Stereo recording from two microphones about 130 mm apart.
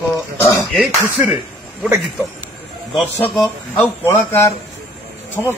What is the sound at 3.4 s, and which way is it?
Speech, 15° left (ahead or behind).